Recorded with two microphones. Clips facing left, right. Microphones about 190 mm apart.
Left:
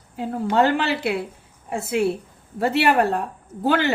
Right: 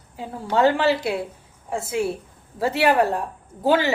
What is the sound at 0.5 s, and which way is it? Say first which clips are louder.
A woman's voice: right 2 dB; 60° left (ahead or behind).